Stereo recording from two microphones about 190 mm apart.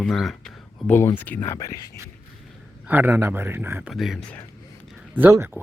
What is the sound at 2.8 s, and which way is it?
Speech, 10° right (ahead or behind).